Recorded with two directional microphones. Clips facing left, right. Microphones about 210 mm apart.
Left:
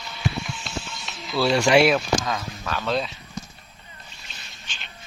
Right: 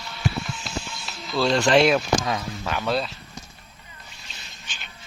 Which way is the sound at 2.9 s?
Centre (ahead or behind).